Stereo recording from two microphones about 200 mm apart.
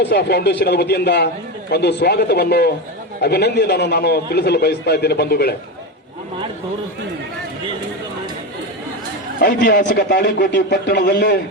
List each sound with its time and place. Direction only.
0.1 s a man's voice: 55° left (ahead or behind)
9.4 s a man's voice: 55° left (ahead or behind)